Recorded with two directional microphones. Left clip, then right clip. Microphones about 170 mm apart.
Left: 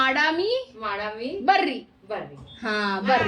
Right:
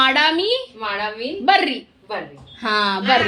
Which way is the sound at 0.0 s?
25° right (ahead or behind).